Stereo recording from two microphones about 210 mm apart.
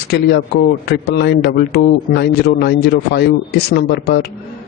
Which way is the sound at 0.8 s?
50° left (ahead or behind).